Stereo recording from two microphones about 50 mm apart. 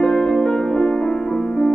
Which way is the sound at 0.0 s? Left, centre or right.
Centre.